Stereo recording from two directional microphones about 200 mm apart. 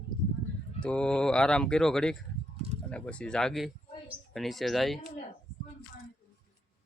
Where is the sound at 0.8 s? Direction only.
5° left (ahead or behind).